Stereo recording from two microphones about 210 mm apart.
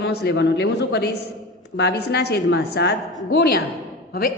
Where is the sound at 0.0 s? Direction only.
50° left (ahead or behind).